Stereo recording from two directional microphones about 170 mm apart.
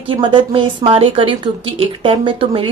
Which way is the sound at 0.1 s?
30° right (ahead or behind).